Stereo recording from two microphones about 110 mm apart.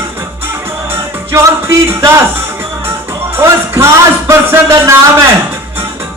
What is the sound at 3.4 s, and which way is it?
Music, 25° right (ahead or behind).